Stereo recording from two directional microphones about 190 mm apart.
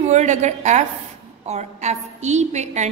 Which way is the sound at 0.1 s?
35° right (ahead or behind).